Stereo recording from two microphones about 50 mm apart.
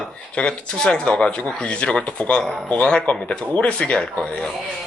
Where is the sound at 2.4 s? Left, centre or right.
Centre.